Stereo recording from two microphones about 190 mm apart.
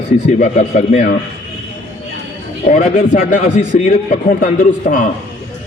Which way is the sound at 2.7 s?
45° left (ahead or behind).